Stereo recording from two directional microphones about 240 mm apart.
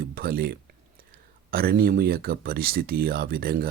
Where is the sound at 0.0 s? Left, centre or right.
Right.